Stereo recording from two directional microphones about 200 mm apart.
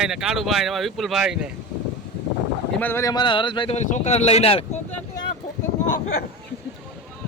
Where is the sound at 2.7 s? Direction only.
10° left (ahead or behind); by 4.6 s 30° left (ahead or behind).